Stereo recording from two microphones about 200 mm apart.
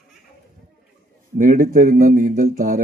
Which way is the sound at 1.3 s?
40° right (ahead or behind).